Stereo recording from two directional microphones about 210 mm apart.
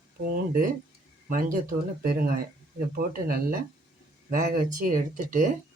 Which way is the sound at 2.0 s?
45° right (ahead or behind).